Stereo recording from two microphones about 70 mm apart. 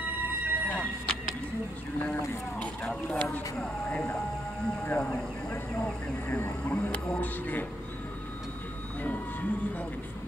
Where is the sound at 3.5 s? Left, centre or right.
Centre.